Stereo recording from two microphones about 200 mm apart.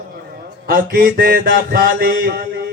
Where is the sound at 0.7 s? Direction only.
45° right (ahead or behind).